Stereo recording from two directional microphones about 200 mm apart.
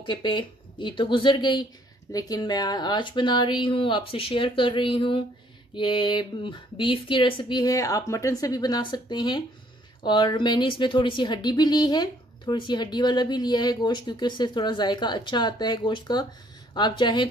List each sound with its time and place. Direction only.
0.0 s speech: 25° left (ahead or behind)